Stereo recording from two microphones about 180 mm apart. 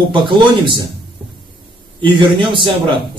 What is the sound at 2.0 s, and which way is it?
Speech, 25° right (ahead or behind).